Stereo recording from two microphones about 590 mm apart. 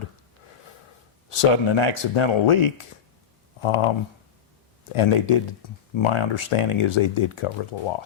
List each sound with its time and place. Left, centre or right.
1.3 s speech: left